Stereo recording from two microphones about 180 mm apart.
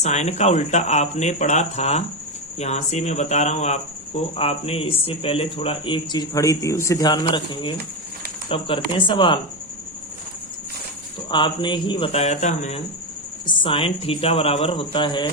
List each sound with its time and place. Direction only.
0.0 s speech: 40° left (ahead or behind)
11.3 s speech: 25° left (ahead or behind)
13.4 s speech: 25° left (ahead or behind)